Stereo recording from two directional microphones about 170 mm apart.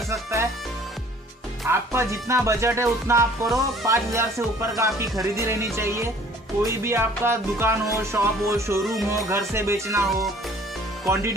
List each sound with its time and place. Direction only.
0.1 s music: 15° right (ahead or behind)
1.7 s speech: 15° right (ahead or behind)